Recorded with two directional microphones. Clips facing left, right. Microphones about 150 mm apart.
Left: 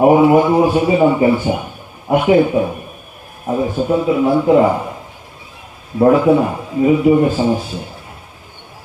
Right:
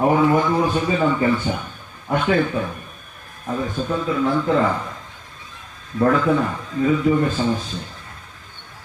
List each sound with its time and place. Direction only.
0.0 s a man's voice: 15° left (ahead or behind)
6.0 s a man's voice: 15° left (ahead or behind)